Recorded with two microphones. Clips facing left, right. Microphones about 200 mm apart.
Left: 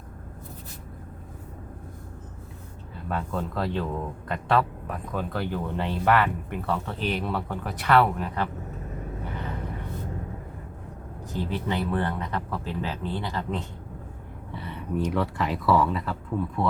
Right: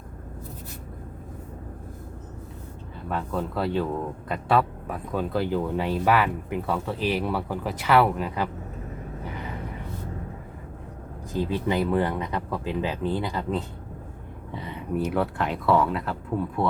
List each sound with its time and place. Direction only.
3.1 s speech: centre (ahead or behind)
11.4 s speech: 15° right (ahead or behind)
14.5 s a sound: 15° right (ahead or behind)
14.9 s speech: 5° right (ahead or behind)